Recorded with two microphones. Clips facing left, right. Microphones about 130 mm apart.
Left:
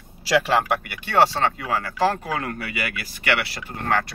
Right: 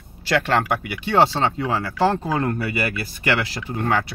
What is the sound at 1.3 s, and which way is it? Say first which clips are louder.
Speech: right 2 dB; 20° right (ahead or behind).